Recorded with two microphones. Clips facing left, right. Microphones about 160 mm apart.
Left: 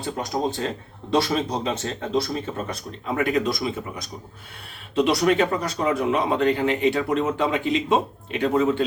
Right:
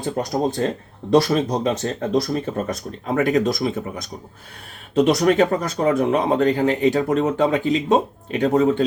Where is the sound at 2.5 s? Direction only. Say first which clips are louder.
Right 5 dB; 45° right (ahead or behind).